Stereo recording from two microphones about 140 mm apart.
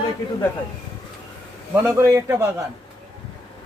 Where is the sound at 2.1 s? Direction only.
20° right (ahead or behind).